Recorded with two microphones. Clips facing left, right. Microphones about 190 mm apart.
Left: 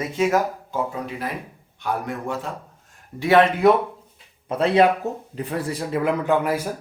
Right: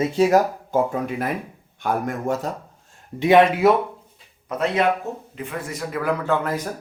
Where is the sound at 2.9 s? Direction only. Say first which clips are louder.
Right 2 dB; 20° right (ahead or behind).